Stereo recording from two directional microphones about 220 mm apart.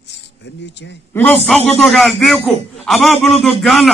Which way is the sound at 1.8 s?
Centre (ahead or behind).